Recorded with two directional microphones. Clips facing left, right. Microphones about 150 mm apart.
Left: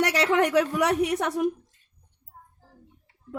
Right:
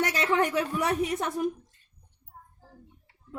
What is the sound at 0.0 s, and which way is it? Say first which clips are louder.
A woman's voice: left 3 dB; 80° left.